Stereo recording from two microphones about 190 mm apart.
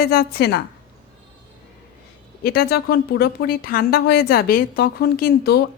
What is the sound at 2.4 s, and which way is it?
Speech, 55° left (ahead or behind).